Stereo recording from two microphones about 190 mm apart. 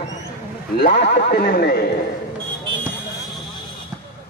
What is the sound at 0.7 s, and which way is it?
Speech, 60° left (ahead or behind).